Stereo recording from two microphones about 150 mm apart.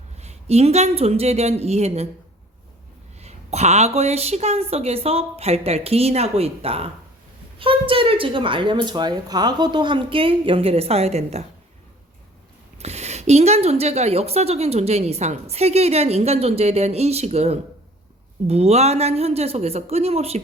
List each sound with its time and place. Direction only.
0.2 s speech: 45° right (ahead or behind)
3.2 s a woman's voice: 45° right (ahead or behind)
12.8 s speech: 45° right (ahead or behind)